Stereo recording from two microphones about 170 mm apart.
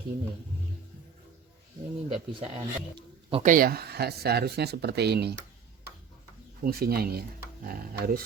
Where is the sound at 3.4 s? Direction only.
60° right (ahead or behind); by 5.3 s 75° right (ahead or behind).